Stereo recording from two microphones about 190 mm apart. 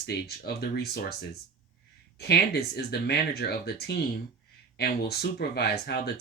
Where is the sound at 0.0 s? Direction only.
55° left (ahead or behind).